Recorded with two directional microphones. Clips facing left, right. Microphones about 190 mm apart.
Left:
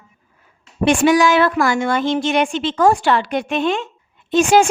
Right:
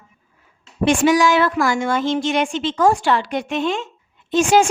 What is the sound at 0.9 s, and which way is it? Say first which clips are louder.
A woman's voice: left 2 dB; 60° left (ahead or behind).